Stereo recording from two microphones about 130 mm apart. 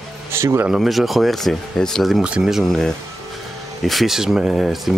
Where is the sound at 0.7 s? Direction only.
Centre (ahead or behind).